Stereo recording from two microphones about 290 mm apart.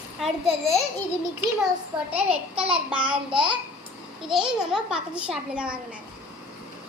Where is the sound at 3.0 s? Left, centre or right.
Centre.